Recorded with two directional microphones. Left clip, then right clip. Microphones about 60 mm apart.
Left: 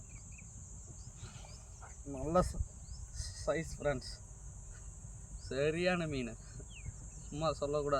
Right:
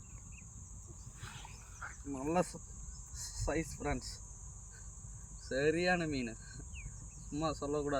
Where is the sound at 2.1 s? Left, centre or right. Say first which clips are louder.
Left 2 dB; left.